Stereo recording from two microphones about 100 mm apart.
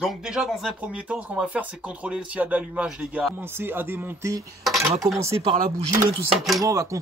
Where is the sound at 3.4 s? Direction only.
25° right (ahead or behind).